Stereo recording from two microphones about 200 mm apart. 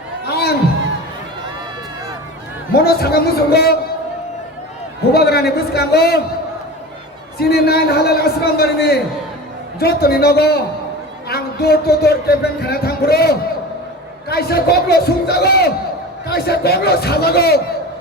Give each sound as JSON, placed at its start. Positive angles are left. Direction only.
{"t": 0.3, "sound": "a sound", "side_deg": 55}
{"t": 2.7, "sound": "speech", "side_deg": 50}
{"t": 5.1, "sound": "speech", "side_deg": 50}
{"t": 7.3, "sound": "speech", "side_deg": 50}